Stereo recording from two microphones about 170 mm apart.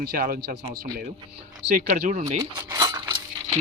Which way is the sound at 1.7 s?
50° right (ahead or behind).